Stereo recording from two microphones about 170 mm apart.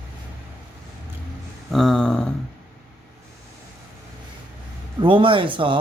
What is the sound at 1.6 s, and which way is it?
Speech, centre (ahead or behind).